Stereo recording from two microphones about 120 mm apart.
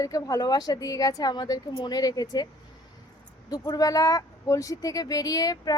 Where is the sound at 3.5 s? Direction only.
30° left (ahead or behind).